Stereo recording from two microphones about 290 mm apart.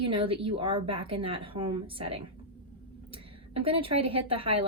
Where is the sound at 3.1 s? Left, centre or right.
Centre.